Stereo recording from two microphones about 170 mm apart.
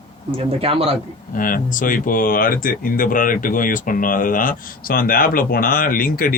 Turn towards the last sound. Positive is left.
turn(degrees=60)  # may be behind; listen again after turning